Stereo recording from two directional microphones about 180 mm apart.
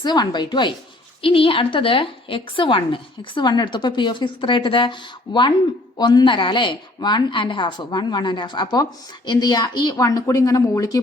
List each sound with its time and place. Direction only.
0.0 s a woman's voice: 25° left (ahead or behind)